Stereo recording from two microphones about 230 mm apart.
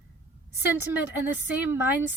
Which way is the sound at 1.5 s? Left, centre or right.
Centre.